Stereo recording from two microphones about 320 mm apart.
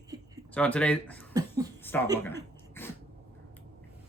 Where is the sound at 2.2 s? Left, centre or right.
Centre.